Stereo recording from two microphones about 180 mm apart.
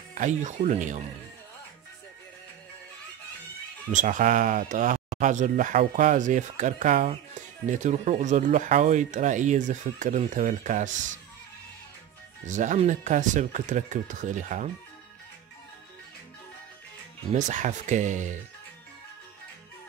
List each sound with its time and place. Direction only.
0.1 s speech: 45° right (ahead or behind)
3.9 s speech: 45° right (ahead or behind)
12.4 s speech: 45° right (ahead or behind)
17.3 s speech: 45° right (ahead or behind)